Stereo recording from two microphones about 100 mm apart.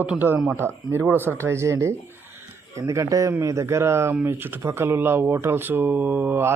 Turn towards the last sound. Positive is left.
turn(degrees=-20)  # may be behind; listen again after turning